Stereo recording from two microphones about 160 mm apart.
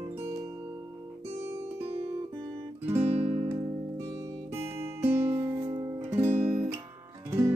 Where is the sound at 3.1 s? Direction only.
35° right (ahead or behind).